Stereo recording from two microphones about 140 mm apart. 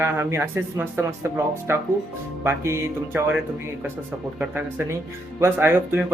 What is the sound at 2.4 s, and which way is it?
Speech, 15° right (ahead or behind).